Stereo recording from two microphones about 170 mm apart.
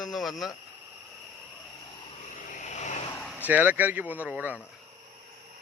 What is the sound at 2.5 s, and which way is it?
Vehicle, 45° left (ahead or behind).